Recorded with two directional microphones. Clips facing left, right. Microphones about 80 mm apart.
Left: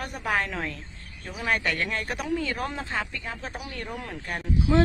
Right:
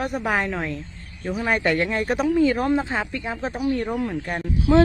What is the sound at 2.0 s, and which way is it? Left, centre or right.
Speech, right.